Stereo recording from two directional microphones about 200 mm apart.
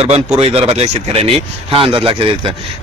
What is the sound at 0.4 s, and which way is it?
Speech, 30° right (ahead or behind).